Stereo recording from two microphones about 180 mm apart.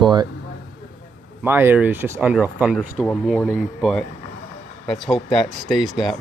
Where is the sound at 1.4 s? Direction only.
10° right (ahead or behind).